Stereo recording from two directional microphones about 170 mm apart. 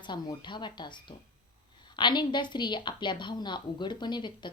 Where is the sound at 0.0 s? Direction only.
25° left (ahead or behind).